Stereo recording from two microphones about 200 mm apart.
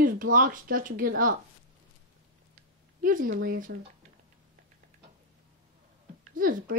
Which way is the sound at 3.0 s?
45° right (ahead or behind).